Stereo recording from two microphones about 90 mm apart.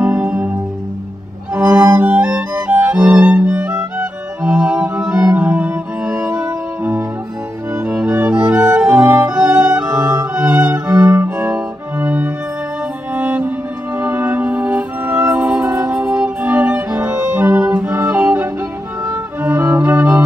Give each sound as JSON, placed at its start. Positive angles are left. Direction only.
{"t": 0.0, "sound": "music", "side_deg": -15}
{"t": 1.5, "sound": "violin", "side_deg": -20}
{"t": 5.3, "sound": "music", "side_deg": -20}